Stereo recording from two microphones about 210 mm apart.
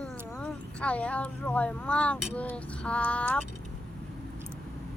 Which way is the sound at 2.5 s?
5° left (ahead or behind).